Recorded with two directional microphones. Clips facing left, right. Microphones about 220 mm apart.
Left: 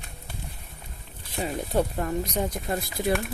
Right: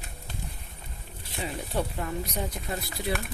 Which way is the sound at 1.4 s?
45° left (ahead or behind).